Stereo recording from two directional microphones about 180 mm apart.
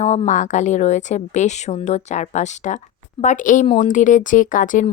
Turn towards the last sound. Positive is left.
turn(degrees=45)  # may be behind; listen again after turning